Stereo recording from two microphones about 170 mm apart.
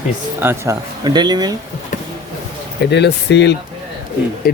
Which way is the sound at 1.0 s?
25° right (ahead or behind).